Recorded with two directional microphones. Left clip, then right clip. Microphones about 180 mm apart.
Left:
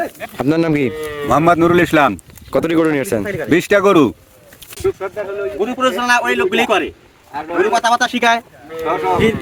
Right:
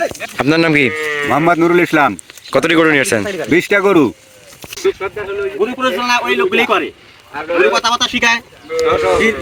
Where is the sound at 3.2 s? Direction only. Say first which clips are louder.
Right 2 dB; 40° right (ahead or behind).